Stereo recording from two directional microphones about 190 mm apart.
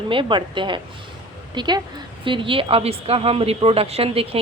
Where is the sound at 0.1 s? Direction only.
25° right (ahead or behind).